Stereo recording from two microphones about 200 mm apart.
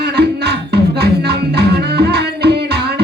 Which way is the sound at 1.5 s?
55° right (ahead or behind).